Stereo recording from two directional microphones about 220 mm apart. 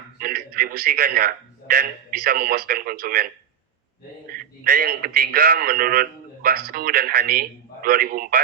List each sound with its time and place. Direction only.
0.2 s a man's voice: 40° right (ahead or behind)
4.3 s a man's voice: 45° right (ahead or behind)